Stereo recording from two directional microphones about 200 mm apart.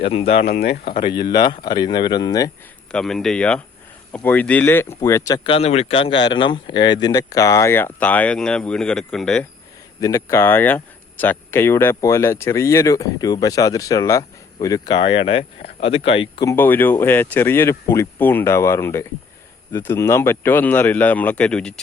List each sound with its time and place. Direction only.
0.0 s speech: 25° left (ahead or behind)
0.4 s speech: 55° left (ahead or behind)
0.9 s speech: 25° left (ahead or behind)
2.9 s speech: centre (ahead or behind)
10.0 s speech: 15° left (ahead or behind)